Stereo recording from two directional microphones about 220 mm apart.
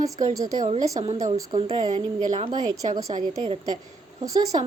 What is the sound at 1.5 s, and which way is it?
A woman's voice, 30° right (ahead or behind).